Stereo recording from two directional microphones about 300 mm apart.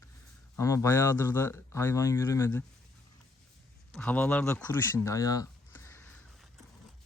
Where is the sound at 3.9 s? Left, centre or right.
Centre.